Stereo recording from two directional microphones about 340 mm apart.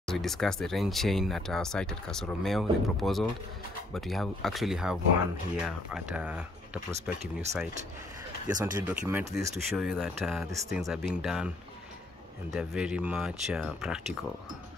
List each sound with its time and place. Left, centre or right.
0.0 s speech: centre
8.5 s speech: centre
12.5 s speech: centre